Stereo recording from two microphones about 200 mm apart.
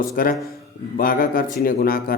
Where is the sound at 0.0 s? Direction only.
45° left (ahead or behind).